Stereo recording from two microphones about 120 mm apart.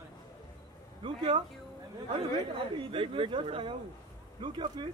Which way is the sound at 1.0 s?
45° right (ahead or behind).